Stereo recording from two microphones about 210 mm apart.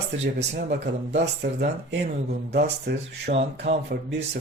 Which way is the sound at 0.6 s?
55° right (ahead or behind).